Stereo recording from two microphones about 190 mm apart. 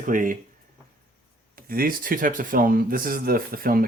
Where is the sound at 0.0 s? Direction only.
45° right (ahead or behind).